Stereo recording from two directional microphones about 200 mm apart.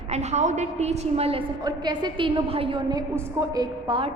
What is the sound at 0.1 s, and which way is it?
A woman's voice, 35° right (ahead or behind).